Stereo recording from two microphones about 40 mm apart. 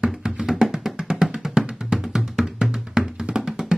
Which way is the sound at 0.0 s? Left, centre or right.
Centre.